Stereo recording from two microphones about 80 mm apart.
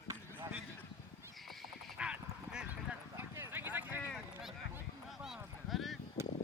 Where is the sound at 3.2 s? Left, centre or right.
Right.